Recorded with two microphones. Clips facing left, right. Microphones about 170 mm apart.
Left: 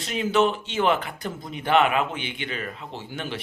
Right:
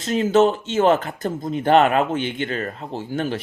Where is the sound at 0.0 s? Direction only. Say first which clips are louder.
Right 6 dB; 45° right (ahead or behind).